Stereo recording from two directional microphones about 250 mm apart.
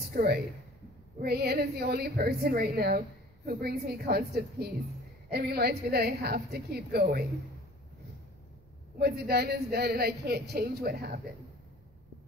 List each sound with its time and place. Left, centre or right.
0.1 s a woman's voice: right
9.0 s a woman's voice: right